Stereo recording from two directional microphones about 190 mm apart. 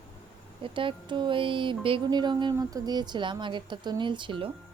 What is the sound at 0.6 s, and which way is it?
Speech, 25° right (ahead or behind).